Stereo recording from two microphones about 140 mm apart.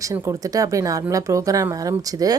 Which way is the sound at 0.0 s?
25° right (ahead or behind).